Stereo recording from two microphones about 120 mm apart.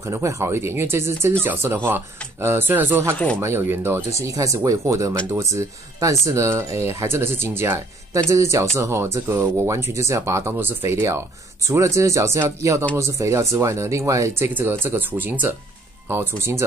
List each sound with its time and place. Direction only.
0.0 s speech: 25° right (ahead or behind)